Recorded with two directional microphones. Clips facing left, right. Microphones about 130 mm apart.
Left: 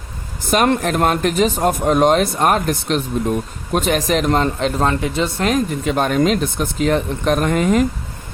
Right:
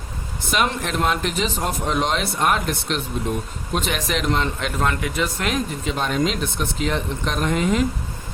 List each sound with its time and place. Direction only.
0.5 s speech: 50° left (ahead or behind); by 5.5 s 30° left (ahead or behind)
5.8 s speech: 55° left (ahead or behind)